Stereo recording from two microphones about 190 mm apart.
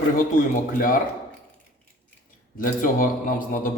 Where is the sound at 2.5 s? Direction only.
45° left (ahead or behind).